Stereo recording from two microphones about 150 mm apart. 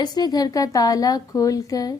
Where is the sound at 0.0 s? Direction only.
25° left (ahead or behind).